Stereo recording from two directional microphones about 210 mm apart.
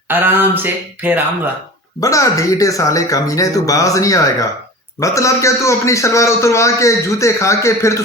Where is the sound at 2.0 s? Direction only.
15° left (ahead or behind).